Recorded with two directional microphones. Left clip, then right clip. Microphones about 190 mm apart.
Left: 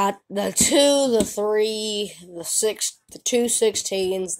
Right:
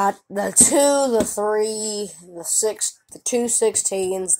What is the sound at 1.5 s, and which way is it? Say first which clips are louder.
Speech: even; 15° right (ahead or behind).